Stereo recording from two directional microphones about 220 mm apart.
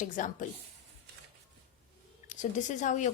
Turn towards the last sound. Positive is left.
turn(degrees=35)  # may be behind; listen again after turning